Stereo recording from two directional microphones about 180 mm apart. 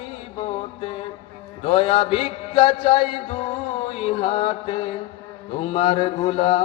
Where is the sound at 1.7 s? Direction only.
30° left (ahead or behind).